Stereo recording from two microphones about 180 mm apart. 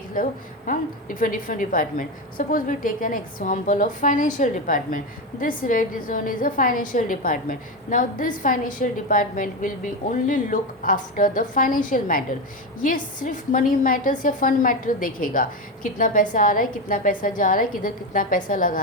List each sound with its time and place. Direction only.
0.1 s a woman's voice: 50° left (ahead or behind)